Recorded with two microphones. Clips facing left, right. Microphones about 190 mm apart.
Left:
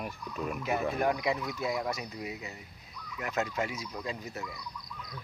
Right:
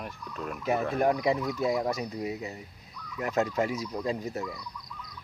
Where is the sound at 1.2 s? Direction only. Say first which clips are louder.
Right 5 dB; 35° right (ahead or behind).